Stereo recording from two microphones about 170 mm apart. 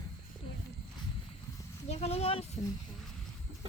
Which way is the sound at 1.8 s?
35° left (ahead or behind).